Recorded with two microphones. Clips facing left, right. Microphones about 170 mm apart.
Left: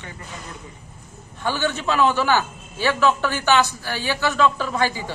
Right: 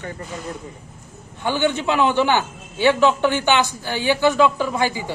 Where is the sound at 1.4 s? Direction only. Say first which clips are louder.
Right 3 dB; 15° right (ahead or behind).